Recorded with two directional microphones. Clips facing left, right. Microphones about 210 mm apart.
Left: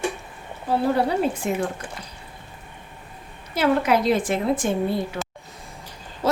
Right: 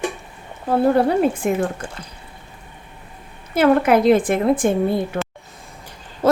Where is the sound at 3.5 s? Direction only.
55° right (ahead or behind).